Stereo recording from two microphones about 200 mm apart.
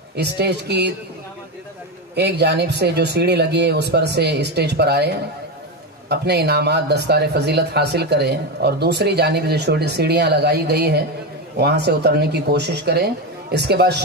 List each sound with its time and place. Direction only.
0.1 s speech: 55° right (ahead or behind)
2.1 s speech: 55° right (ahead or behind)